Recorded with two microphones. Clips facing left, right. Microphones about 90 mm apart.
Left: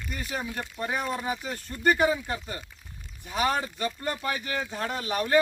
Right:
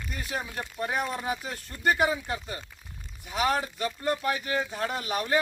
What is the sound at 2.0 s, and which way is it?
Speech, 10° right (ahead or behind).